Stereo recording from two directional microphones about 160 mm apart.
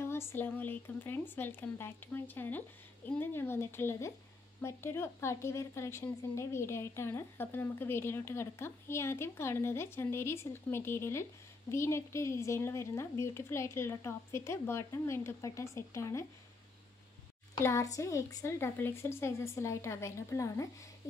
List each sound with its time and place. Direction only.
0.0 s speech: 15° left (ahead or behind)
17.6 s speech: 20° left (ahead or behind)